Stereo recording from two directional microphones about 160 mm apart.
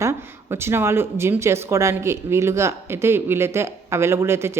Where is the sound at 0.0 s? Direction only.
15° right (ahead or behind).